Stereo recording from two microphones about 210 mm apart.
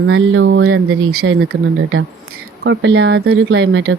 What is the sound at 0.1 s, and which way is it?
Speech, 65° right (ahead or behind).